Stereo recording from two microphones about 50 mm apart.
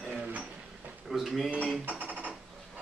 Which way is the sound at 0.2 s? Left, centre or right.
Right.